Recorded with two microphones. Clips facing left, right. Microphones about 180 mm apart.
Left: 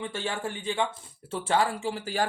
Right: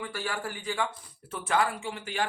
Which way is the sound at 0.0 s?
25° left (ahead or behind).